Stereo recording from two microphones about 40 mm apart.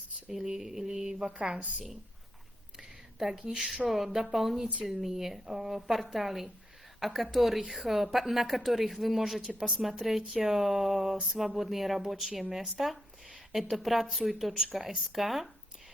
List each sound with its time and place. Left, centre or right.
0.3 s a sound: centre
3.2 s a woman's voice: centre
3.4 s a woman's voice: right
3.8 s a woman's voice: centre